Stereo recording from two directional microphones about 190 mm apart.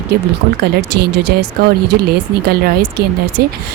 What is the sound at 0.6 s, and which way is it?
A woman's voice, 60° right (ahead or behind).